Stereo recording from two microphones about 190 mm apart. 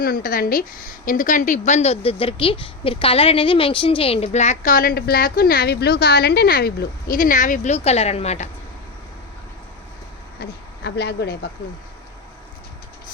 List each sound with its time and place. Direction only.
0.0 s a woman's voice: 50° left (ahead or behind)
10.4 s a woman's voice: 55° left (ahead or behind)